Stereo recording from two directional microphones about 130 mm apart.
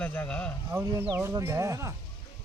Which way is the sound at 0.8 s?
25° right (ahead or behind).